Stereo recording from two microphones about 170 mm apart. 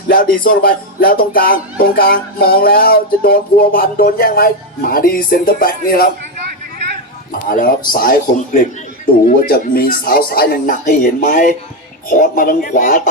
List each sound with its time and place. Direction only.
0.1 s music: 55° left (ahead or behind)
7.5 s music: 60° left (ahead or behind)
12.0 s speech: 50° left (ahead or behind)